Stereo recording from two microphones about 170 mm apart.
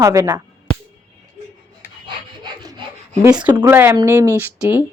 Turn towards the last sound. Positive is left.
turn(degrees=-10)  # may be behind; listen again after turning